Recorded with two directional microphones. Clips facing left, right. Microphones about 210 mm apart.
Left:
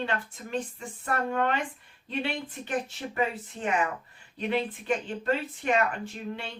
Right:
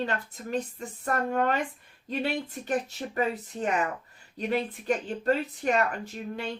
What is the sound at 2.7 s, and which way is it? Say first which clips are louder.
Speech: right 2 dB; 40° right (ahead or behind).